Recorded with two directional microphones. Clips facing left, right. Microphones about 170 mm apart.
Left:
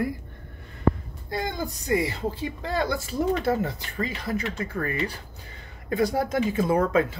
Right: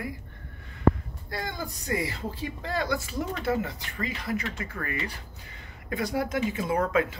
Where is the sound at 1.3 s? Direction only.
20° left (ahead or behind).